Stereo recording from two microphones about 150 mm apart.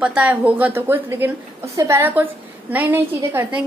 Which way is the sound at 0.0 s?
10° right (ahead or behind).